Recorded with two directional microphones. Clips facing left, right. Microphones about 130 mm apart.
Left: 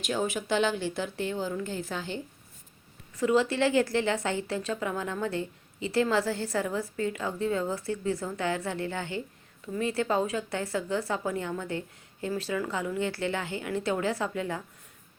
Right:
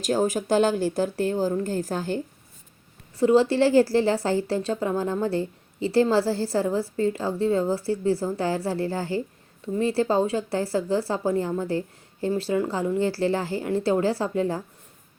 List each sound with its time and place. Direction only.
0.0 s speech: 40° right (ahead or behind)
3.2 s a woman's voice: 30° right (ahead or behind)